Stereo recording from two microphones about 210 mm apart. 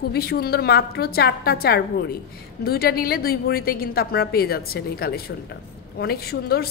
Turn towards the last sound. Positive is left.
turn(degrees=50)  # may be behind; listen again after turning